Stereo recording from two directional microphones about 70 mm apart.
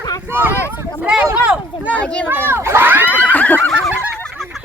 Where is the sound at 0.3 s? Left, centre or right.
Right.